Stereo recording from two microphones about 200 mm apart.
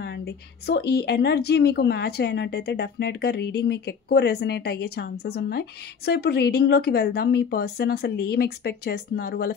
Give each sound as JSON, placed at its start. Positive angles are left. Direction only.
{"t": 0.0, "sound": "a woman's voice", "side_deg": 60}